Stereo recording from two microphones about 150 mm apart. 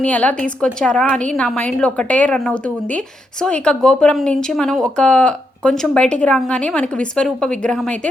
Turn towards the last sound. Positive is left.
turn(degrees=5)  # may be behind; listen again after turning